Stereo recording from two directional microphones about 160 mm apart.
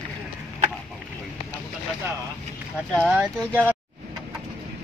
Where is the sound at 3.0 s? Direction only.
5° right (ahead or behind).